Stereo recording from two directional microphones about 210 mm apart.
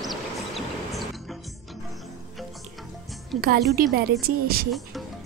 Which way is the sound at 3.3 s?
45° right (ahead or behind).